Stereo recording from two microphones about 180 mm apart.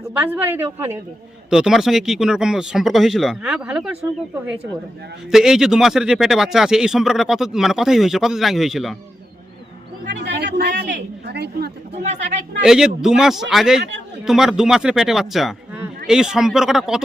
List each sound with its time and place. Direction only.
0.1 s a woman's voice: 10° right (ahead or behind)
5.3 s speech: 5° right (ahead or behind)
10.2 s a sound: 70° right (ahead or behind)
12.0 s speech: 40° right (ahead or behind)
12.6 s speech: 5° right (ahead or behind)